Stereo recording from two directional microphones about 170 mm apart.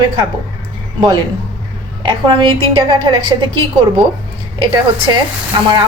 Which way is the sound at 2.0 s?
30° right (ahead or behind).